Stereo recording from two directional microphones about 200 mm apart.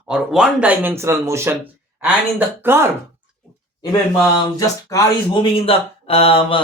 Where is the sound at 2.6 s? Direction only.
10° right (ahead or behind).